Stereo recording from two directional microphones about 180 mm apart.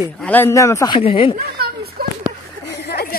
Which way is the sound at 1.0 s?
30° left (ahead or behind).